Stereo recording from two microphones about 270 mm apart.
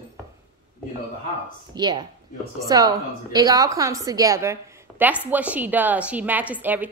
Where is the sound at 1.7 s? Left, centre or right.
Centre.